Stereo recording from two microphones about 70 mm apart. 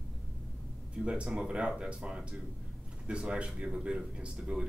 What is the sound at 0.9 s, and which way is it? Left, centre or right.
Speech, centre.